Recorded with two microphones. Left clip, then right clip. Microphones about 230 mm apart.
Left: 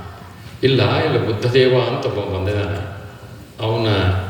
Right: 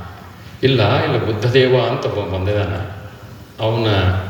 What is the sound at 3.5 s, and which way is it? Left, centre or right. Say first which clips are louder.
Speech: right 2 dB; right.